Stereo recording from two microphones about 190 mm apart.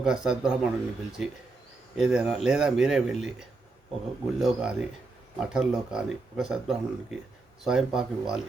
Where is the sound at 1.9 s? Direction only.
5° right (ahead or behind).